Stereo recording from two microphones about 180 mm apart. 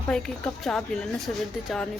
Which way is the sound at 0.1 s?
5° left (ahead or behind).